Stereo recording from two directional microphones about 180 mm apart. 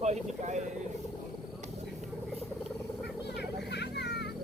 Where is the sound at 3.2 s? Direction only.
70° left (ahead or behind).